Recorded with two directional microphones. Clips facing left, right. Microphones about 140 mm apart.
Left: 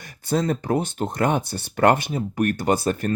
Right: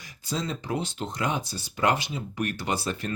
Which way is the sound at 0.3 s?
55° left (ahead or behind).